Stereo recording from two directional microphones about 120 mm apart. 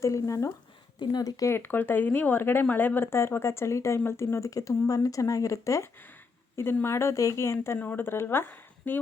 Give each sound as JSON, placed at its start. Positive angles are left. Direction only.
{"t": 0.0, "sound": "speech", "side_deg": 25}